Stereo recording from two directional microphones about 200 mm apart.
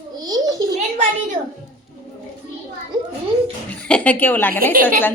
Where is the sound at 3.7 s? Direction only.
5° left (ahead or behind).